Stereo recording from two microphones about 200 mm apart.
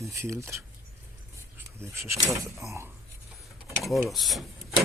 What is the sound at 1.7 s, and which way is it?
Speech, 15° right (ahead or behind).